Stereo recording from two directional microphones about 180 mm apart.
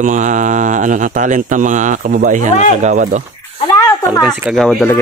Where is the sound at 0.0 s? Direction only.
45° right (ahead or behind).